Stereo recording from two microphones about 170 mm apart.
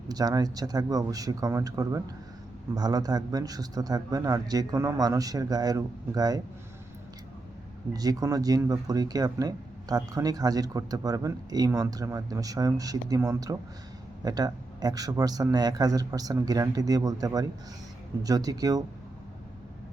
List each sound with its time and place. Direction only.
0.1 s speech: 20° right (ahead or behind)
7.9 s speech: 20° right (ahead or behind)